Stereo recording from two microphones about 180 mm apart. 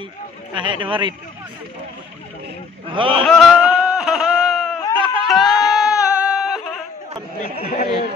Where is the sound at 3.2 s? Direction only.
Centre (ahead or behind).